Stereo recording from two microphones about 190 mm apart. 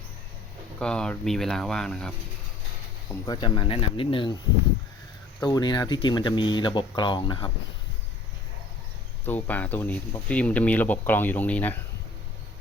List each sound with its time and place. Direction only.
0.8 s speech: 5° left (ahead or behind)
3.2 s speech: 25° left (ahead or behind)
5.4 s speech: 20° left (ahead or behind)
9.2 s speech: 10° left (ahead or behind)